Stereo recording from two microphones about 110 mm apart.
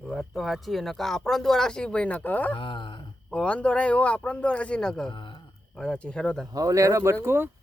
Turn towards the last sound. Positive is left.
turn(degrees=-20)  # may be behind; listen again after turning